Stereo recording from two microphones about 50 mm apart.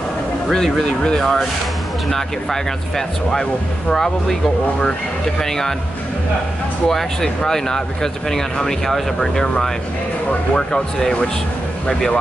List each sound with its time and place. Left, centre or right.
0.5 s speech: centre
3.9 s speech: centre
6.9 s speech: centre